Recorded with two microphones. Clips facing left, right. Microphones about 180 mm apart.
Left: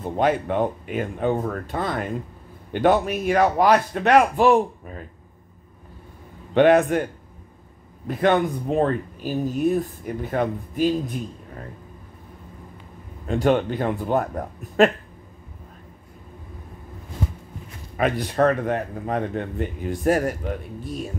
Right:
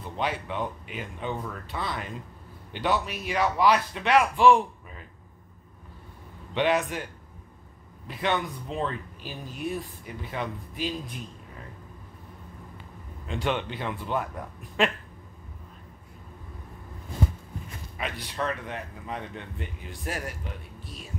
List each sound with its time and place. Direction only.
0.0 s speech: 45° left (ahead or behind)
6.5 s speech: 50° left (ahead or behind)
8.1 s speech: 50° left (ahead or behind)
13.3 s speech: 45° left (ahead or behind)
17.9 s speech: 50° left (ahead or behind)